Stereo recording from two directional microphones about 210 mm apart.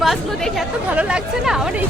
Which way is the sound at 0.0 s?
Centre (ahead or behind).